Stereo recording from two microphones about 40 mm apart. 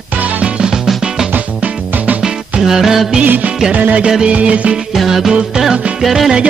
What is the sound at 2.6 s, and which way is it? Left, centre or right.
Music, centre.